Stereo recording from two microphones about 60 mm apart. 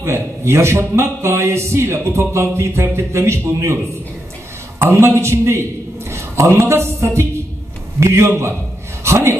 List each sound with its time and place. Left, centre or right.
0.0 s speech: right
4.7 s a man's voice: right
9.0 s a sound: right